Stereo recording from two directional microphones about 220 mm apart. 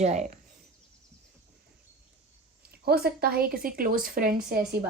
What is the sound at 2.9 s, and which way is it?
A woman's voice, 45° right (ahead or behind).